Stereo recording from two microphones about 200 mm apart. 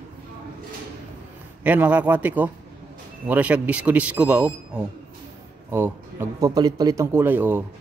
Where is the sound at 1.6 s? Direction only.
5° right (ahead or behind).